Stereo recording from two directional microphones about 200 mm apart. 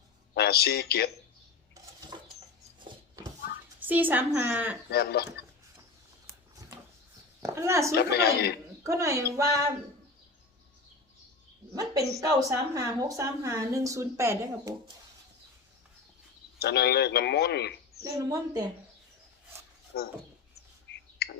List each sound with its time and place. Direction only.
0.3 s speech: 55° left (ahead or behind)
1.7 s a sound: 20° right (ahead or behind)
3.8 s a woman's voice: 10° right (ahead or behind)
4.9 s speech: 55° left (ahead or behind)
7.4 s a woman's voice: 15° right (ahead or behind)
7.9 s a woman's voice: 55° left (ahead or behind)
8.8 s a woman's voice: 15° right (ahead or behind)
11.7 s a woman's voice: 15° right (ahead or behind)
16.6 s speech: 55° left (ahead or behind)
18.0 s a woman's voice: 20° right (ahead or behind)
20.8 s bird: 55° left (ahead or behind)